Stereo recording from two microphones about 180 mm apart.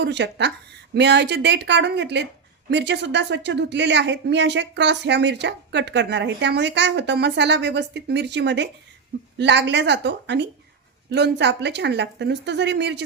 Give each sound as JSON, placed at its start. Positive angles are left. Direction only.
{"t": 0.0, "sound": "a woman's voice", "side_deg": -75}